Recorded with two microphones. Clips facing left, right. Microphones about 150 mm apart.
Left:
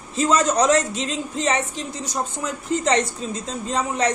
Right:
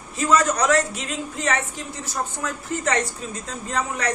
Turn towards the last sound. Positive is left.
turn(degrees=20)  # may be behind; listen again after turning